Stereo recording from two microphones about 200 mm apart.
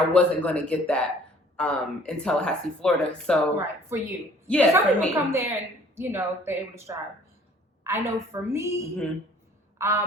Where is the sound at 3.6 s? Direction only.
10° right (ahead or behind).